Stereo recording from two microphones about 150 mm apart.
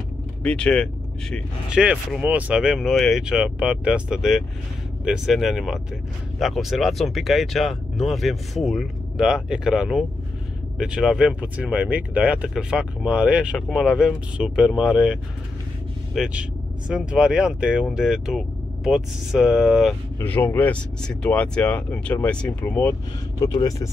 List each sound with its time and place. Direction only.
0.4 s speech: 5° left (ahead or behind)
1.7 s speech: 5° right (ahead or behind)
16.2 s speech: 5° right (ahead or behind)
20.2 s speech: 15° left (ahead or behind)
23.4 s speech: 25° left (ahead or behind)